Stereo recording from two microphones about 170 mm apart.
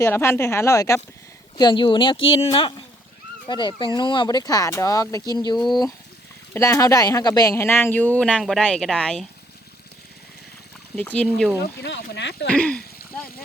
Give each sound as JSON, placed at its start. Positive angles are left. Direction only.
{"t": 0.0, "sound": "speech", "side_deg": 15}
{"t": 10.9, "sound": "speech", "side_deg": 10}
{"t": 11.8, "sound": "speech", "side_deg": 90}
{"t": 12.5, "sound": "speech", "side_deg": 5}